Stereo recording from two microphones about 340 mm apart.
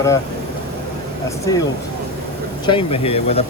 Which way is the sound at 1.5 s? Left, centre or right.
Centre.